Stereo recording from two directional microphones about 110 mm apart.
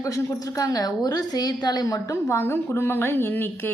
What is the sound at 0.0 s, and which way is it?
A woman's voice, 30° left (ahead or behind).